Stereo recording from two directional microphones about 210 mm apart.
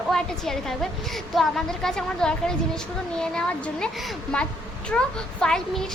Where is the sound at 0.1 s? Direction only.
Centre (ahead or behind).